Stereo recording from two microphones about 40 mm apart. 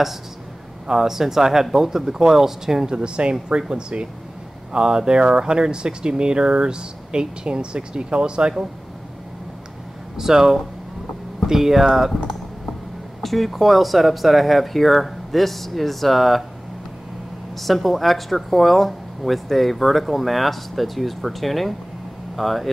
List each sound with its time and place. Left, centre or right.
0.8 s speech: centre
10.1 s speech: centre
13.2 s speech: centre
17.6 s speech: centre